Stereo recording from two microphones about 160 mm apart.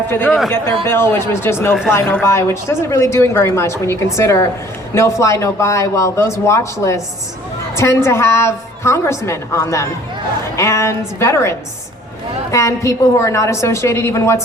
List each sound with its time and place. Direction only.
0.1 s speech: 10° left (ahead or behind)